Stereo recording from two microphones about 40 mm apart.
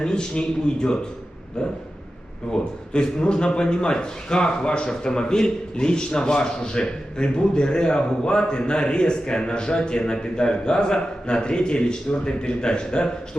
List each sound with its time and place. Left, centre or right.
0.0 s a man's voice: left
2.5 s a man's voice: centre